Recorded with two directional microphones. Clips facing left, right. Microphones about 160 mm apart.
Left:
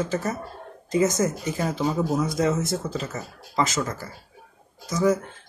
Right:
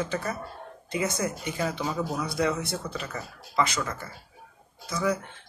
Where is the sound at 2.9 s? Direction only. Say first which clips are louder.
Left 4 dB; 25° left (ahead or behind).